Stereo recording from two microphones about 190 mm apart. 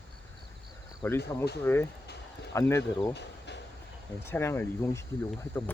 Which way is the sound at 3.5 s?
65° left (ahead or behind).